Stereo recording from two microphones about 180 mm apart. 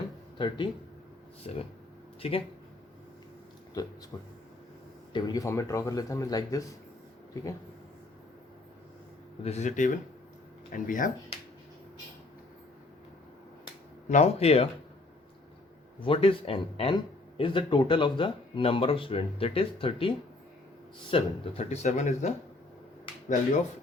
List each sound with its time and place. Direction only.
0.3 s speech: 25° left (ahead or behind)
1.5 s speech: 35° left (ahead or behind)
3.8 s speech: 20° left (ahead or behind)
9.4 s speech: 40° left (ahead or behind)
14.1 s speech: 40° left (ahead or behind)
16.0 s speech: 30° left (ahead or behind)